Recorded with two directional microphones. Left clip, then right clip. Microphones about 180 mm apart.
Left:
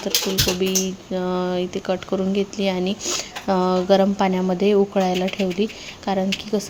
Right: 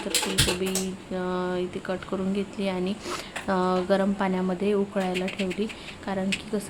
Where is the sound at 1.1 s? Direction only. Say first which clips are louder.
Left 5 dB; 25° left (ahead or behind).